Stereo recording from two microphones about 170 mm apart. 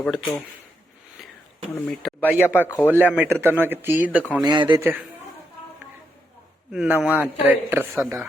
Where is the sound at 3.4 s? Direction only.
10° right (ahead or behind).